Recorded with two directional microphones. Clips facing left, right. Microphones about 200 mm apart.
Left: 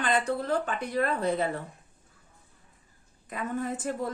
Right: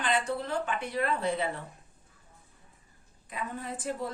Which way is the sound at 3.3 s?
50° left (ahead or behind).